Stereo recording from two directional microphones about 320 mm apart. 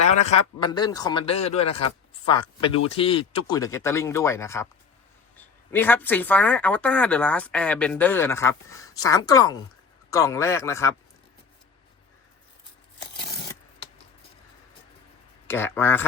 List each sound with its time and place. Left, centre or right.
0.3 s speech: centre
5.7 s a woman's voice: centre
15.4 s speech: centre